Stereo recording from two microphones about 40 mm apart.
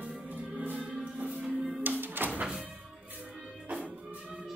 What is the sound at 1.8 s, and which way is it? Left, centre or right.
Music, right.